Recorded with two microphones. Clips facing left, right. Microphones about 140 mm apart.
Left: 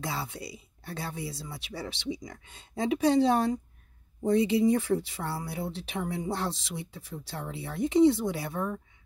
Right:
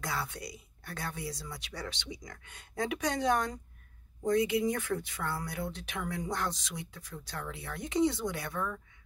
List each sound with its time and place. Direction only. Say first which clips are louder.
0.0 s speech: left 2 dB; 25° left (ahead or behind)